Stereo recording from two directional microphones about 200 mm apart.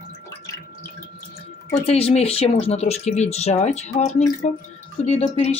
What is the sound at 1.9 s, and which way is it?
Speech, 30° left (ahead or behind).